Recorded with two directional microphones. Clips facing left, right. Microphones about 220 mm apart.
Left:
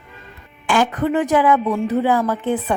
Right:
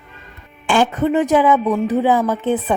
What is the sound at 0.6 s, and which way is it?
A woman's voice, 25° right (ahead or behind).